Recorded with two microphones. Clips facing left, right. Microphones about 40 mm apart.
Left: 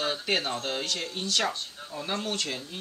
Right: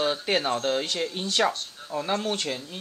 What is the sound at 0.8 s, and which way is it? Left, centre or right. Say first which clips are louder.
Speech: right 3 dB; centre.